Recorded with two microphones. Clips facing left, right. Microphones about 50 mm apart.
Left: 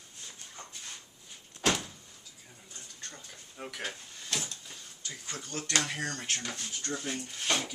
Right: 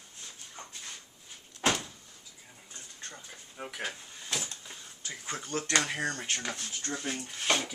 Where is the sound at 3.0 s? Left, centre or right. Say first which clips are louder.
Right 2 dB; centre.